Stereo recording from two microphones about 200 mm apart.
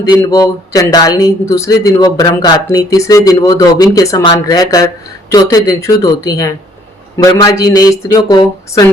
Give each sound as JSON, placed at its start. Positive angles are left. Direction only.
{"t": 0.1, "sound": "speech", "side_deg": 15}